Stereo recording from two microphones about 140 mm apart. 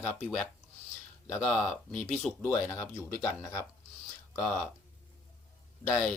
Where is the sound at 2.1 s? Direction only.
Centre (ahead or behind).